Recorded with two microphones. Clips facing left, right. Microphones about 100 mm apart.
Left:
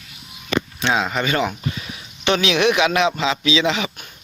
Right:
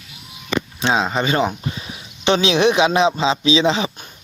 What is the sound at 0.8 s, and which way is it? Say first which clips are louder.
Speech: right 3 dB; 25° right (ahead or behind).